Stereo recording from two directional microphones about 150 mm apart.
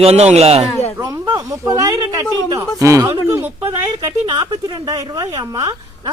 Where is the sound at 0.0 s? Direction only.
45° right (ahead or behind).